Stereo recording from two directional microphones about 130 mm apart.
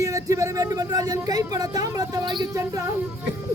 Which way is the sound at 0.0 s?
25° right (ahead or behind).